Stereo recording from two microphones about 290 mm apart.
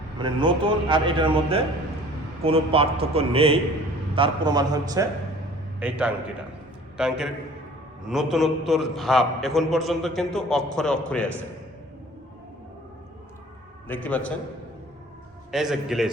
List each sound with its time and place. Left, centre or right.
0.2 s a man's voice: centre
13.8 s a man's voice: centre
15.5 s a man's voice: centre